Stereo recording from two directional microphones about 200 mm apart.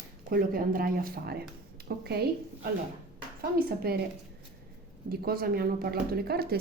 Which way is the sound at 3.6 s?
50° right (ahead or behind).